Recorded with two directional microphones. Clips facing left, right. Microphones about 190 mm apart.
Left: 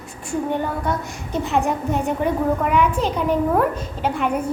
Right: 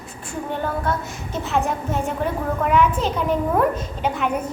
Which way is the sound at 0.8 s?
15° left (ahead or behind).